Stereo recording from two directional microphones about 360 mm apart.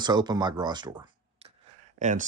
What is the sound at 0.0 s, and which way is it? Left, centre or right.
Speech, centre.